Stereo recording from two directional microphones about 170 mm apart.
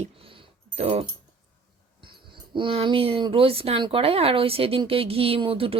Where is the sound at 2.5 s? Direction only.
30° right (ahead or behind).